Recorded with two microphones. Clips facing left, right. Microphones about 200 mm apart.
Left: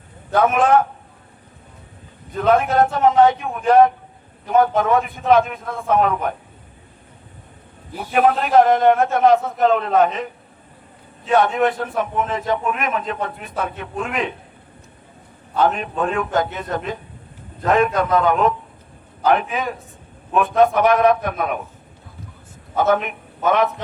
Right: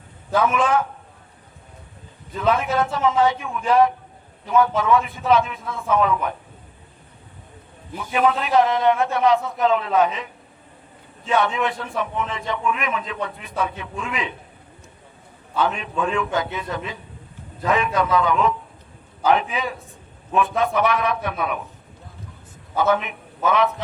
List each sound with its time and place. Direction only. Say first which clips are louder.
0.3 s a man's voice: left 4 dB; 50° left (ahead or behind)
2.3 s a man's voice: left 4 dB; 50° left (ahead or behind)
8.1 s a man's voice: left 4 dB; 50° left (ahead or behind)
11.3 s a man's voice: left 5 dB; 45° left (ahead or behind)
15.5 s a man's voice: left 4 dB; 50° left (ahead or behind)
22.8 s a man's voice: left 2 dB; 50° left (ahead or behind)